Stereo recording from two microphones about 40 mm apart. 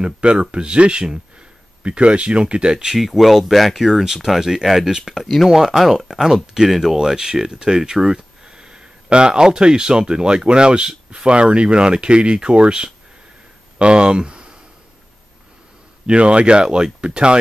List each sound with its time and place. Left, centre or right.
0.0 s speech: right
2.7 s speech: centre
3.0 s speech: centre
5.2 s speech: centre
5.5 s speech: centre; by 14.5 s right
16.1 s speech: right